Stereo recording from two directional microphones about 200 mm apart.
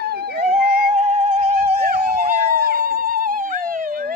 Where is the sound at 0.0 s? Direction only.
50° right (ahead or behind).